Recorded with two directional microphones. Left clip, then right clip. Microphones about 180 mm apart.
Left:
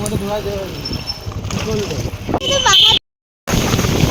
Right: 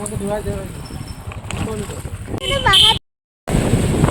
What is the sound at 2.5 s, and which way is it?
Speech, 60° left (ahead or behind).